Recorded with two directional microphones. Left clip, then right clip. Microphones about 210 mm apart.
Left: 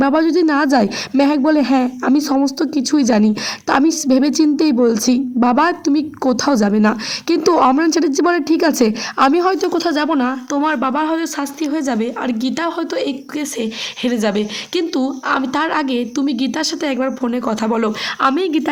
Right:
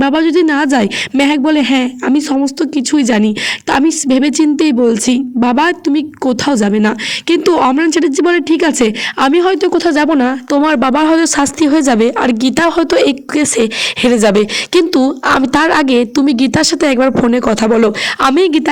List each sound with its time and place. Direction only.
0.3 s speech: 30° right (ahead or behind)